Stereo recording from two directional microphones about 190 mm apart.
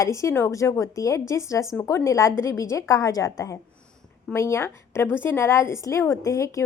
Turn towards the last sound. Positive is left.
turn(degrees=15)  # may be behind; listen again after turning